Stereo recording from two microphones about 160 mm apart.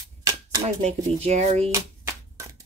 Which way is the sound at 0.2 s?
25° right (ahead or behind).